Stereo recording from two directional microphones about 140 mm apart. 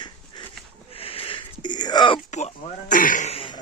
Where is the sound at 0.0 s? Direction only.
35° left (ahead or behind).